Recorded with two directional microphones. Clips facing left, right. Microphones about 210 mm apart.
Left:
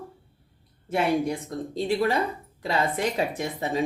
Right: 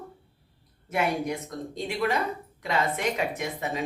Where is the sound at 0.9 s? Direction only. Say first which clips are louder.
Left 3 dB; 30° left (ahead or behind).